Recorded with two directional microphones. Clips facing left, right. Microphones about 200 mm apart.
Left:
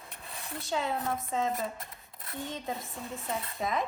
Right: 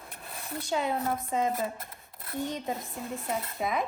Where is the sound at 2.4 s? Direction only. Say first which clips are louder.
Right 4 dB; 15° right (ahead or behind).